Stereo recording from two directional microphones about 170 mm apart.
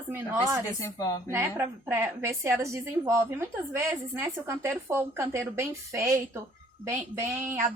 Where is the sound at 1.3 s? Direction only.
15° right (ahead or behind).